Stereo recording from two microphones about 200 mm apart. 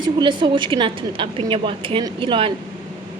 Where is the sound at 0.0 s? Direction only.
25° right (ahead or behind).